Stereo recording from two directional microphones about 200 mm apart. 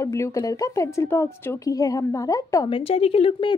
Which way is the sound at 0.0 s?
15° left (ahead or behind).